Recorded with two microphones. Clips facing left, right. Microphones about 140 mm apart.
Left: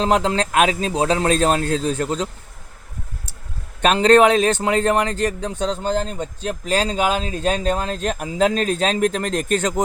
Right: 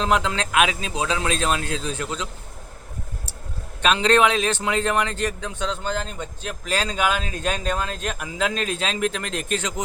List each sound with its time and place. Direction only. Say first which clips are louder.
0.0 s a man's voice: left 4 dB; 35° left (ahead or behind)
3.8 s a man's voice: left 5 dB; 45° left (ahead or behind)